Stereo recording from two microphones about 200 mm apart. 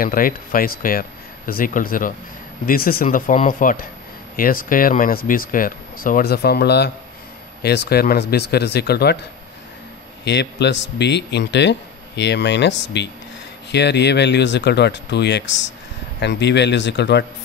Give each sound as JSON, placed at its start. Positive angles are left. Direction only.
{"t": 0.0, "sound": "speech", "side_deg": 45}
{"t": 10.2, "sound": "speech", "side_deg": 60}